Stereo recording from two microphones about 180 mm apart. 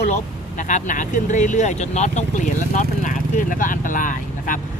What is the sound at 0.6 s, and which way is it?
Speech, 45° left (ahead or behind).